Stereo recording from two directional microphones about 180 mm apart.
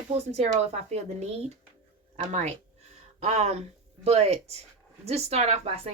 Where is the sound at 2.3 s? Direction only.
40° right (ahead or behind).